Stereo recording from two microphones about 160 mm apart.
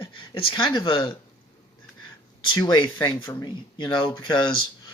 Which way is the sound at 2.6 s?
25° left (ahead or behind).